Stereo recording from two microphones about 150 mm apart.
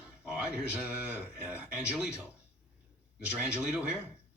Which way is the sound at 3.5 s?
5° right (ahead or behind).